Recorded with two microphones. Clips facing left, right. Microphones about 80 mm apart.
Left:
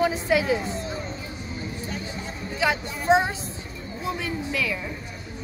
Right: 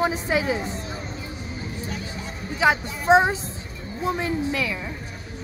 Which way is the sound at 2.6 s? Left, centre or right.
Centre.